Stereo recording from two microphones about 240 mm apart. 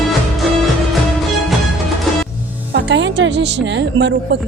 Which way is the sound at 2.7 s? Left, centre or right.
Right.